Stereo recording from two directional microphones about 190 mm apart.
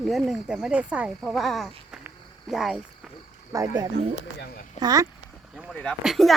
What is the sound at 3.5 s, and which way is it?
Speech, 15° right (ahead or behind).